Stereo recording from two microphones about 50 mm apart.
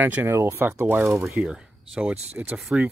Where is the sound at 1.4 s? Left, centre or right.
Centre.